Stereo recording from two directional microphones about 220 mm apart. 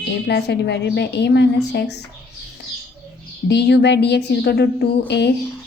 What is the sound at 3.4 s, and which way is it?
A woman's voice, 50° left (ahead or behind).